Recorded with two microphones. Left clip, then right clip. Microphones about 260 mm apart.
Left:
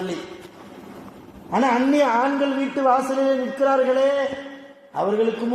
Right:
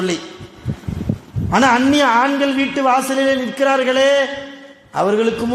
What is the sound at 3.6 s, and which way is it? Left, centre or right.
Speech, right.